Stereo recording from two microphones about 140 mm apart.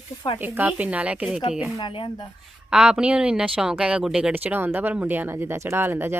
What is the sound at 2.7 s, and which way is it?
Speech, 5° right (ahead or behind).